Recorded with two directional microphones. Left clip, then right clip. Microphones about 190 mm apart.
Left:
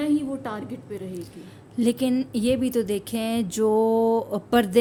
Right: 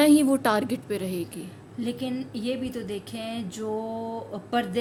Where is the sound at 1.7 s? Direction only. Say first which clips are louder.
Left 8 dB; 70° left (ahead or behind).